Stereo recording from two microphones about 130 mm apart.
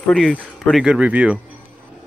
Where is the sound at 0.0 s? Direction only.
5° left (ahead or behind); by 1.4 s 10° right (ahead or behind).